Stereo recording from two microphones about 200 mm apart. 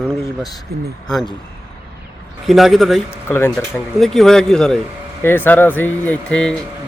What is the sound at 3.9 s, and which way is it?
Speech, centre (ahead or behind).